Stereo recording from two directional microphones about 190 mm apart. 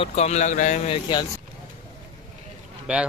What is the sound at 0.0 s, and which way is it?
Speech, 35° left (ahead or behind).